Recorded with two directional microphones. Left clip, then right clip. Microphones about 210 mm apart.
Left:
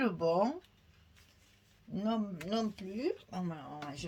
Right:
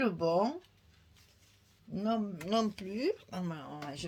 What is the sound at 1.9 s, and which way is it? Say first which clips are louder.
Speech: right 2 dB; 25° right (ahead or behind).